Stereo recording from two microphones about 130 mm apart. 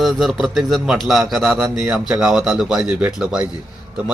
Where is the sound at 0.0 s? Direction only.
Centre (ahead or behind).